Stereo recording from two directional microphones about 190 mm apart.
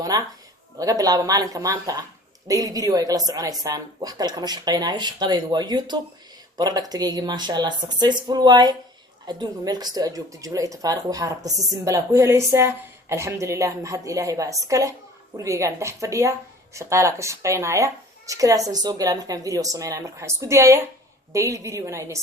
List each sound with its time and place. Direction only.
0.0 s speech: 20° right (ahead or behind)